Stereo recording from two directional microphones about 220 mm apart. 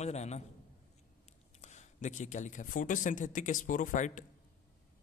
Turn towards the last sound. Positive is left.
turn(degrees=35)  # may be behind; listen again after turning